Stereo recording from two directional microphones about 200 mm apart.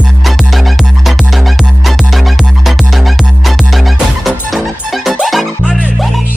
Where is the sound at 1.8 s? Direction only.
Centre (ahead or behind).